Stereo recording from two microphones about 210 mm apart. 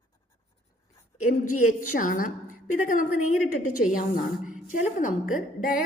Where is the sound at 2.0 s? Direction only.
40° left (ahead or behind).